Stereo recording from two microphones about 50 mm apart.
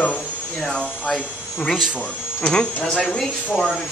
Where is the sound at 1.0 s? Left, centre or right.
Centre.